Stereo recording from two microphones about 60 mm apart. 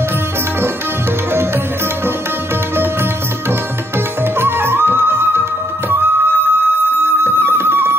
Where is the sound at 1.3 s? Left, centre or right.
Right.